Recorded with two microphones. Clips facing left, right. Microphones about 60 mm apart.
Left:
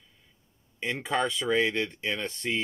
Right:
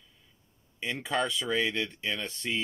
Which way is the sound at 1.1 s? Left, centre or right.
Left.